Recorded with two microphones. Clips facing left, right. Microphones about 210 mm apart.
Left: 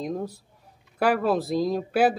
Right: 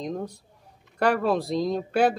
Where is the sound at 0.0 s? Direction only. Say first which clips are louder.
Left 1 dB; 5° left (ahead or behind).